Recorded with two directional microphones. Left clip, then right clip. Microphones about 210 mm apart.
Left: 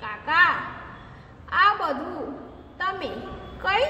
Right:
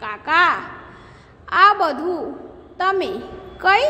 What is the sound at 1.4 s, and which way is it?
A woman's voice, 50° right (ahead or behind).